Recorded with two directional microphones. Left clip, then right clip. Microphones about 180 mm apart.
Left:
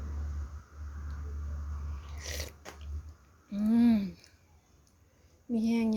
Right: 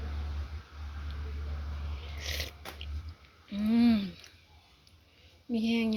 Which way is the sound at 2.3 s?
35° left (ahead or behind).